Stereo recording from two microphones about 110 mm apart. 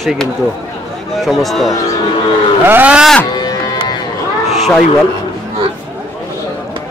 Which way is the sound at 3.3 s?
40° left (ahead or behind).